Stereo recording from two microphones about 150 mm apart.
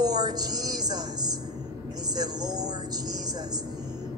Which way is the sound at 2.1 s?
25° right (ahead or behind).